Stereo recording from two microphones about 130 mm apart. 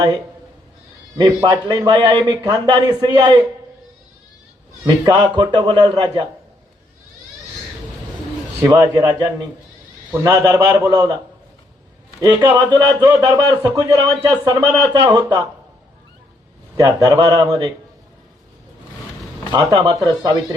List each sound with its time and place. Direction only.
1.1 s a man's voice: 30° right (ahead or behind)
4.9 s a man's voice: 35° right (ahead or behind)
8.6 s a man's voice: 30° right (ahead or behind)
12.2 s a man's voice: 35° right (ahead or behind)
16.7 s a man's voice: 25° right (ahead or behind)
19.5 s a man's voice: 35° right (ahead or behind)